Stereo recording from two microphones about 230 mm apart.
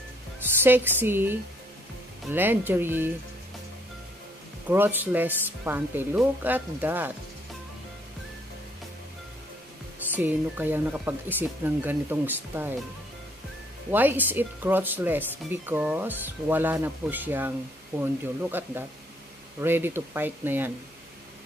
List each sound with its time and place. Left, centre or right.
0.4 s a woman's voice: centre
4.6 s speech: centre
10.1 s speech: centre
13.9 s speech: centre